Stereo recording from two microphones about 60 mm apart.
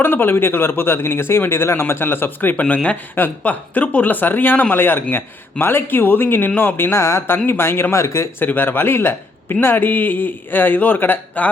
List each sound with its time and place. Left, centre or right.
0.0 s speech: left
8.4 s speech: left